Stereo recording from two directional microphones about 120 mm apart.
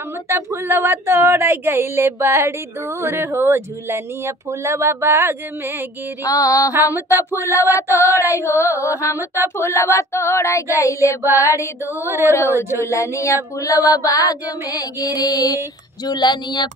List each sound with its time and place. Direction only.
0.3 s speech: 20° right (ahead or behind)
6.2 s child singing: 30° left (ahead or behind)
7.1 s speech: 20° right (ahead or behind)
7.5 s child singing: 25° left (ahead or behind)
12.0 s speech: 20° right (ahead or behind)
12.3 s child singing: 20° left (ahead or behind)
16.1 s speech: 35° left (ahead or behind)